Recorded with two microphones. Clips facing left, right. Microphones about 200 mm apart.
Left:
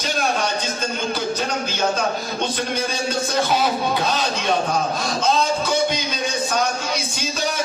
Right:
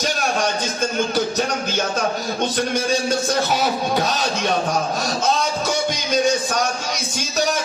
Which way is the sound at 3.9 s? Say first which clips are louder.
Right 1 dB; 45° right (ahead or behind).